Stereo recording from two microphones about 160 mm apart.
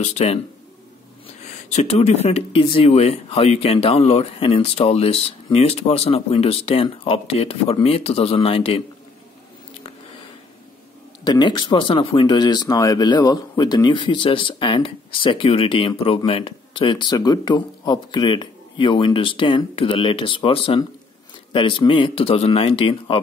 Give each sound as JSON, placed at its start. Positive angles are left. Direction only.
{"t": 0.0, "sound": "speech", "side_deg": 40}
{"t": 1.7, "sound": "speech", "side_deg": 45}
{"t": 11.2, "sound": "speech", "side_deg": 30}